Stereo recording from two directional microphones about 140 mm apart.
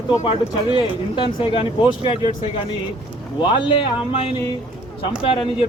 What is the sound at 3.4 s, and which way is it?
Speech, 35° left (ahead or behind).